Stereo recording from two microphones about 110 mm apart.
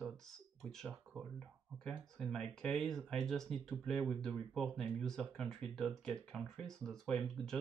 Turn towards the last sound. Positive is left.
turn(degrees=5)  # may be behind; listen again after turning